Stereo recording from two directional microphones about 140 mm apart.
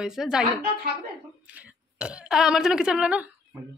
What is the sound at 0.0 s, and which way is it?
Speech, 5° right (ahead or behind).